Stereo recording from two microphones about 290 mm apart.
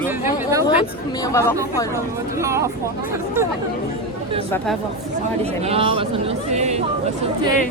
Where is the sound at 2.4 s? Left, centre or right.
Centre.